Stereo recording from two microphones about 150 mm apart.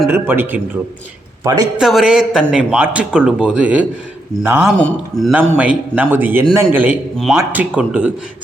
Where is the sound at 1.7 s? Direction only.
Centre (ahead or behind).